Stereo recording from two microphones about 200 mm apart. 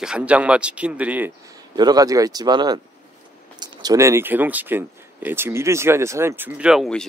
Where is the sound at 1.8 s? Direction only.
20° right (ahead or behind).